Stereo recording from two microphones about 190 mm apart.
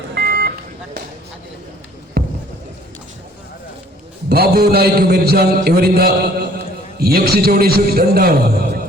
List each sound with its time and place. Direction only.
0.1 s vehicle: 55° right (ahead or behind)
2.2 s a sound: 60° right (ahead or behind)
4.3 s a man's voice: 55° right (ahead or behind)